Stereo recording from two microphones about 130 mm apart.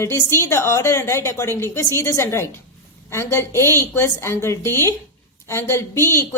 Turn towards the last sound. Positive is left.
turn(degrees=20)  # may be behind; listen again after turning